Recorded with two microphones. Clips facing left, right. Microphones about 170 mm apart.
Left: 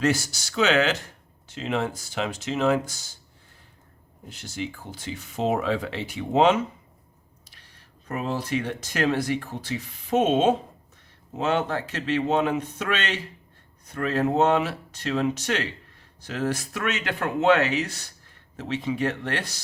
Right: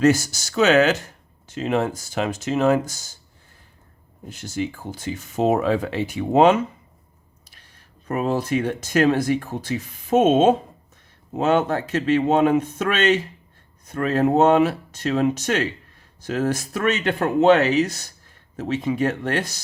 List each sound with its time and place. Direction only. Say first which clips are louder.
0.0 s speech: right 7 dB; 45° right (ahead or behind)
4.3 s speech: right 6 dB; 45° right (ahead or behind)
8.0 s speech: right 6 dB; 45° right (ahead or behind)